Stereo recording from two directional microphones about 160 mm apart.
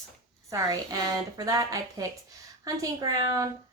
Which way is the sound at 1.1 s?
20° right (ahead or behind).